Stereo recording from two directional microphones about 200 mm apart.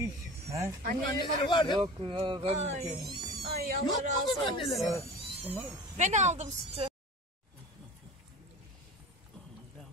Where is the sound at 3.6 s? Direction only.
45° right (ahead or behind).